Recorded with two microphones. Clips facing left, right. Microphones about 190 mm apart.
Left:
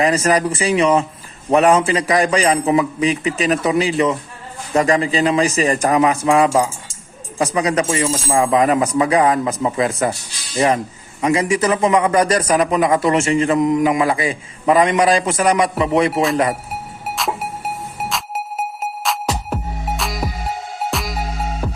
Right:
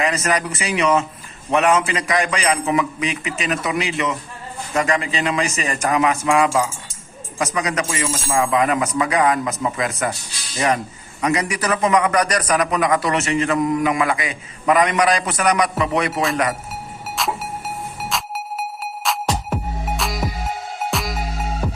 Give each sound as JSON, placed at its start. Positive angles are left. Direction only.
{"t": 0.0, "sound": "a man's voice", "side_deg": 35}
{"t": 11.2, "sound": "a man's voice", "side_deg": 25}
{"t": 19.0, "sound": "music", "side_deg": 0}